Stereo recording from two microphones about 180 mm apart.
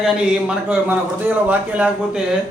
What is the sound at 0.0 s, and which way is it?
A man's voice, 5° right (ahead or behind).